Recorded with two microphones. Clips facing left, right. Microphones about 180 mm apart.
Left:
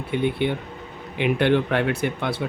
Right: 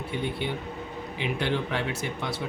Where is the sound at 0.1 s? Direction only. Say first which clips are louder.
Left 9 dB; 60° left (ahead or behind).